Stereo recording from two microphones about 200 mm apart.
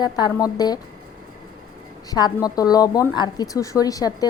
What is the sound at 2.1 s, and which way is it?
A woman's voice, 20° left (ahead or behind).